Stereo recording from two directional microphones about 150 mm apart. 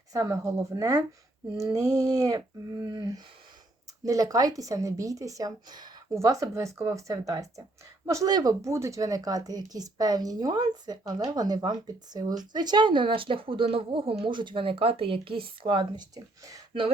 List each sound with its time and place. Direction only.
0.1 s a woman's voice: 25° right (ahead or behind)